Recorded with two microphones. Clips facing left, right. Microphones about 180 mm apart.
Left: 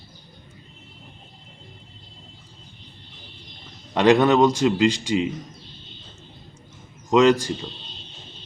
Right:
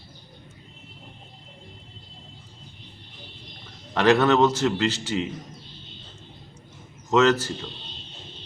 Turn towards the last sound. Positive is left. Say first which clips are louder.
# left 3 dB
turn(degrees=15)  # may be behind; listen again after turning